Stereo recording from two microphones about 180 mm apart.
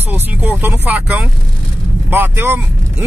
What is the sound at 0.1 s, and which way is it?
Speech, 10° right (ahead or behind).